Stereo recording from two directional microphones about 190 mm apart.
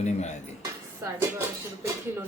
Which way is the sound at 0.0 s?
35° left (ahead or behind).